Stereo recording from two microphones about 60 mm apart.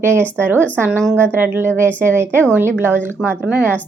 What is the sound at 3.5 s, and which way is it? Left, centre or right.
Speech, right.